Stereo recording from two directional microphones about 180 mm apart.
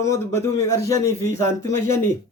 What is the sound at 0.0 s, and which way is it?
Speech, 15° left (ahead or behind).